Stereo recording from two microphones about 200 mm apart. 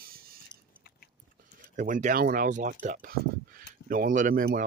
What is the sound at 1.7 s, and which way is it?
Speech, 40° right (ahead or behind).